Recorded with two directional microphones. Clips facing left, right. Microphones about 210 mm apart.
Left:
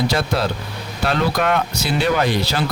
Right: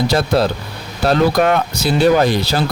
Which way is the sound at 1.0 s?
40° right (ahead or behind).